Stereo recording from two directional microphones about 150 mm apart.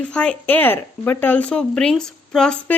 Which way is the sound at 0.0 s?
5° left (ahead or behind).